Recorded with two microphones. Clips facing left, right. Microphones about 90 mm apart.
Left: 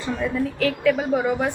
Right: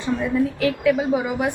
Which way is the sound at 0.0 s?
15° right (ahead or behind).